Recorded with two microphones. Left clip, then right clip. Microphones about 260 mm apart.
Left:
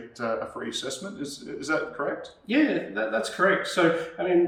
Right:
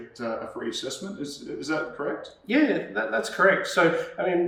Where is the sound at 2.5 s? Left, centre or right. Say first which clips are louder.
Right 1 dB; centre.